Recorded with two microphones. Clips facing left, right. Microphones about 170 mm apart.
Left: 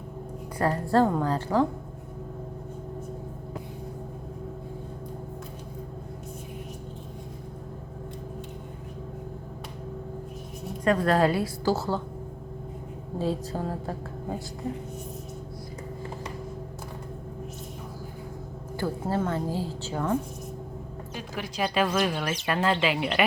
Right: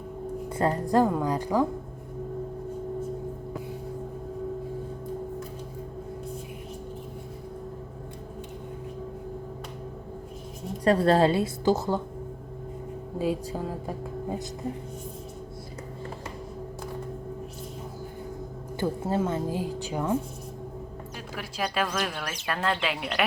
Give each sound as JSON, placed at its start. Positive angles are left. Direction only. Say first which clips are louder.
{"t": 0.5, "sound": "a woman's voice", "louder": "even", "side_deg": -20}
{"t": 10.8, "sound": "a woman's voice", "louder": "right 2 dB", "side_deg": -30}
{"t": 13.1, "sound": "a woman's voice", "louder": "even", "side_deg": -10}
{"t": 19.1, "sound": "a woman's voice", "louder": "even", "side_deg": -15}
{"t": 21.3, "sound": "speech", "louder": "left 3 dB", "side_deg": 0}